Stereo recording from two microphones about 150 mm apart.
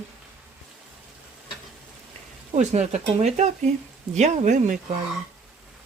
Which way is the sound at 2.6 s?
50° right (ahead or behind).